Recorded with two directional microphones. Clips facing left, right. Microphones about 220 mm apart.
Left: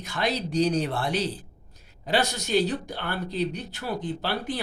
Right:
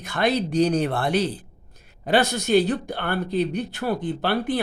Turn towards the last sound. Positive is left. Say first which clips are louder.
# right 6 dB
turn(degrees=-55)  # may be behind; listen again after turning